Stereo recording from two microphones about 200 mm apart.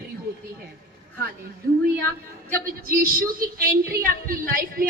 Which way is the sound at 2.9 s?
45° right (ahead or behind).